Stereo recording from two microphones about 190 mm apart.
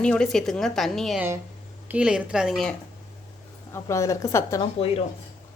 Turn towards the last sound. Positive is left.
turn(degrees=30)  # may be behind; listen again after turning